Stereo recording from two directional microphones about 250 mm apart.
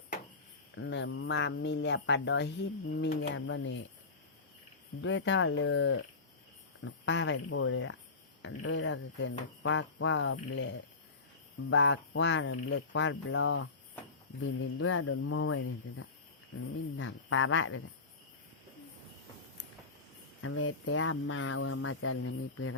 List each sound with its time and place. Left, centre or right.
0.8 s speech: left
4.9 s speech: left
12.7 s speech: left
14.8 s speech: left
20.4 s speech: left